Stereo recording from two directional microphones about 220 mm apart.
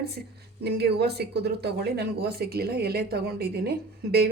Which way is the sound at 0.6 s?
45° right (ahead or behind).